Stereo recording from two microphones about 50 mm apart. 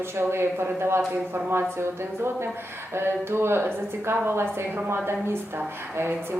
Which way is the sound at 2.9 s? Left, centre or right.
Right.